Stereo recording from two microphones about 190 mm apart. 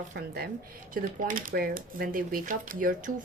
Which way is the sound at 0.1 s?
55° right (ahead or behind).